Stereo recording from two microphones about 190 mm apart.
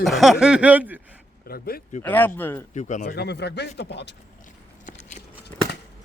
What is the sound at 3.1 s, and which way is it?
Speech, 60° left (ahead or behind).